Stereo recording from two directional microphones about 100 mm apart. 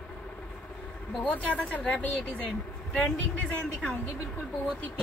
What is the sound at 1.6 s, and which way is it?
A woman's voice, 10° left (ahead or behind).